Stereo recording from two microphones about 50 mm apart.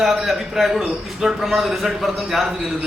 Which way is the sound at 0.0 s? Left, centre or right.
Centre.